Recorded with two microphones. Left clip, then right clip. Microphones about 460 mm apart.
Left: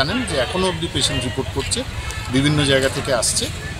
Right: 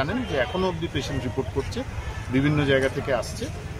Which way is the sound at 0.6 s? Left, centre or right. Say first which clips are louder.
Left 6 dB; right.